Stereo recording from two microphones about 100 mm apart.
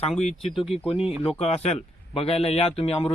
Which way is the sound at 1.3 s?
90° left.